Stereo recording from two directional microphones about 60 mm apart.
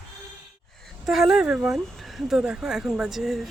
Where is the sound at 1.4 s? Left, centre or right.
Centre.